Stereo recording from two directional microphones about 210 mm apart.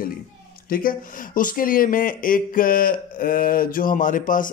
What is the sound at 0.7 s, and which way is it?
A man's voice, 40° left (ahead or behind).